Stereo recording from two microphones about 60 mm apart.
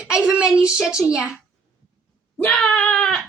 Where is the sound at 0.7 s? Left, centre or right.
Centre.